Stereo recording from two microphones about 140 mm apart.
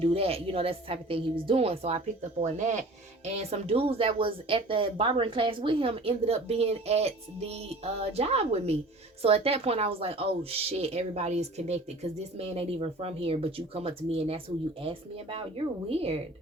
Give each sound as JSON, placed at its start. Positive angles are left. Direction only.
{"t": 0.0, "sound": "speech", "side_deg": -45}
{"t": 2.4, "sound": "speech", "side_deg": -55}
{"t": 3.5, "sound": "speech", "side_deg": -45}